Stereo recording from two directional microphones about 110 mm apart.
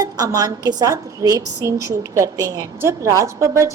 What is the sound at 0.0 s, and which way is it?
A woman's voice, 35° right (ahead or behind).